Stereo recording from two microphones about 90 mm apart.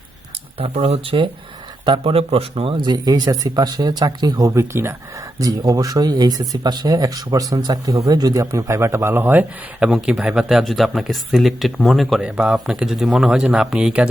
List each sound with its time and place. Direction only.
0.6 s speech: 80° right; by 4.5 s 50° right (ahead or behind)
4.5 s speech: 30° right (ahead or behind)
5.4 s speech: 40° right (ahead or behind); by 9.9 s 20° right (ahead or behind)
9.9 s speech: 10° right (ahead or behind)